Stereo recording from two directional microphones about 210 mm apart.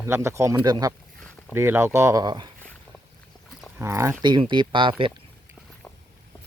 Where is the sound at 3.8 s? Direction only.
15° right (ahead or behind).